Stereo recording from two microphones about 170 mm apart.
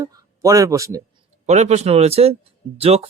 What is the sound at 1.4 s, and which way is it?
Speech, 40° right (ahead or behind).